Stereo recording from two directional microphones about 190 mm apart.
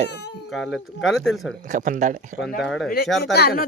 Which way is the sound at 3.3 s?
55° left (ahead or behind).